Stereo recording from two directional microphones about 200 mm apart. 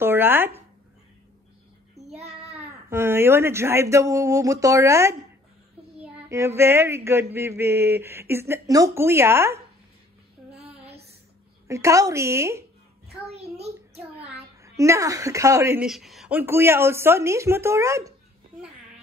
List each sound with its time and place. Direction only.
0.0 s a sound: 10° right (ahead or behind)
2.0 s child singing: 35° right (ahead or behind)
2.9 s speech: 10° right (ahead or behind)
6.2 s speech: 15° right (ahead or behind)
11.6 s speech: 15° right (ahead or behind)
13.2 s child singing: 30° right (ahead or behind)
14.6 s speech: 15° right (ahead or behind)
15.9 s speech: centre (ahead or behind)